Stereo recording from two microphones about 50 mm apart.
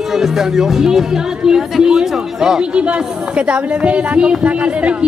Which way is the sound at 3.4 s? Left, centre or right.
Right.